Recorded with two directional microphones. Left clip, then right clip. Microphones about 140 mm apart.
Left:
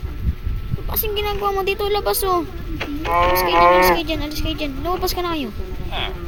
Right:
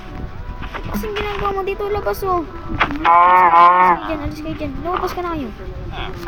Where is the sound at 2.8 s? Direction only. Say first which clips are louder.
Right 7 dB; 20° left (ahead or behind).